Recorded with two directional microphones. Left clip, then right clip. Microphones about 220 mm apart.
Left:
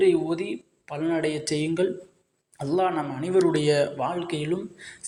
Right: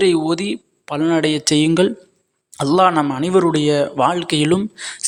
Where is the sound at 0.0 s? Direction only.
45° right (ahead or behind); by 3.9 s 25° right (ahead or behind).